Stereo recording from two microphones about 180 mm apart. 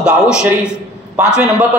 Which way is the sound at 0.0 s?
5° right (ahead or behind).